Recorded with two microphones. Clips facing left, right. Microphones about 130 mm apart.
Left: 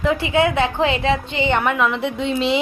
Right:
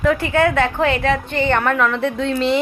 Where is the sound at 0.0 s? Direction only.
20° left (ahead or behind).